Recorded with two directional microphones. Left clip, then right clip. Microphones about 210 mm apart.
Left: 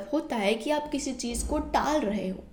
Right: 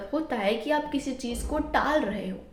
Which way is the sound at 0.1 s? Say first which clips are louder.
Even; 40° left (ahead or behind).